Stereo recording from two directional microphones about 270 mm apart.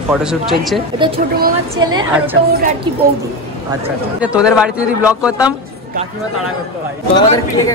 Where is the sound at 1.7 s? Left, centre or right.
Centre.